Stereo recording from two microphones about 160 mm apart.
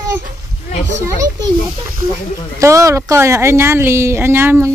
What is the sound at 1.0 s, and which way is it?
A child's voice, 20° right (ahead or behind).